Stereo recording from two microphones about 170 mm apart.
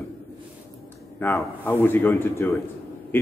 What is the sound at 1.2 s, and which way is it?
A man's voice, 15° left (ahead or behind).